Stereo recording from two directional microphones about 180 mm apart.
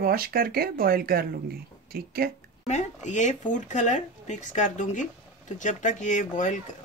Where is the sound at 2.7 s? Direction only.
40° left (ahead or behind).